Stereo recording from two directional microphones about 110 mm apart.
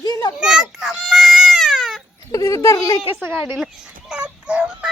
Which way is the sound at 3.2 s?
20° right (ahead or behind).